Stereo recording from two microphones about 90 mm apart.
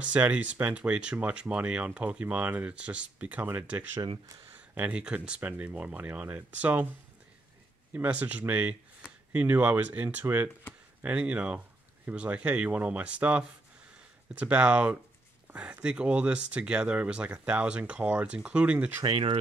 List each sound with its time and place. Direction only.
0.0 s speech: 15° right (ahead or behind)
4.7 s speech: 15° right (ahead or behind)
7.9 s speech: 20° right (ahead or behind)
19.0 s speech: 90° right